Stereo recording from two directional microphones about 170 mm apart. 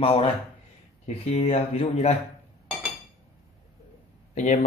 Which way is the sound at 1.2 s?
35° left (ahead or behind).